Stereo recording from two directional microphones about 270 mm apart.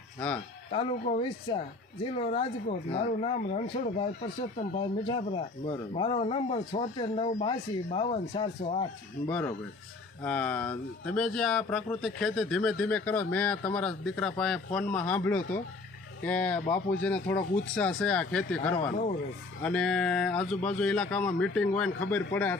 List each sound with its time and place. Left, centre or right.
0.7 s speech: centre
10.2 s speech: centre
18.7 s speech: left
19.6 s a man's voice: centre